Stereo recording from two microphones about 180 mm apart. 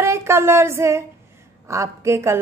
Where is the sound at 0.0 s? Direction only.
15° right (ahead or behind).